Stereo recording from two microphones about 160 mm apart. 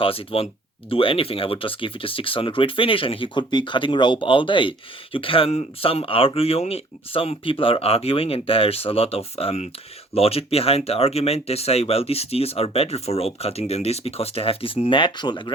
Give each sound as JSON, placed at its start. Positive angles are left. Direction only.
{"t": 0.0, "sound": "speech", "side_deg": 35}